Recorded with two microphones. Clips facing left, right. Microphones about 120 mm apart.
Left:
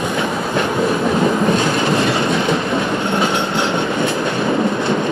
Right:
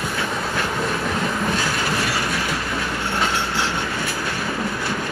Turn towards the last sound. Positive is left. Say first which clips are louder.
# left 7 dB
turn(degrees=20)  # may be behind; listen again after turning